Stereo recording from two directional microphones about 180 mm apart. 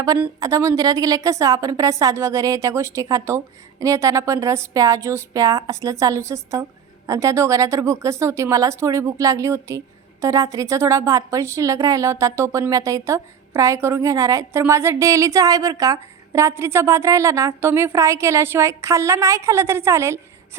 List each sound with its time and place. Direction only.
0.3 s speech: 20° right (ahead or behind)